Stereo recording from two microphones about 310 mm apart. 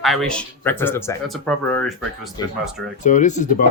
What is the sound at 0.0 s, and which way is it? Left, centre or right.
Speech, centre.